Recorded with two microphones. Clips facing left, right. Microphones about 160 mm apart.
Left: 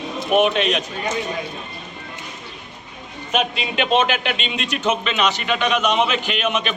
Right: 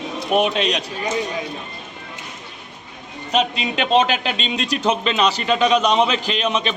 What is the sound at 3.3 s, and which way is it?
A man's voice, 35° right (ahead or behind).